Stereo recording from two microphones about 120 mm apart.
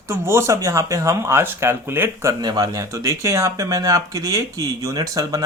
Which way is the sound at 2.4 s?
30° right (ahead or behind).